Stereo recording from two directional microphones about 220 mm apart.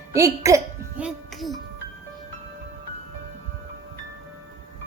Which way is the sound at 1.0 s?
Centre (ahead or behind).